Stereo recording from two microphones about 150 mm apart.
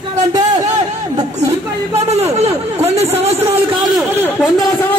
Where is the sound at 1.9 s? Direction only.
45° right (ahead or behind).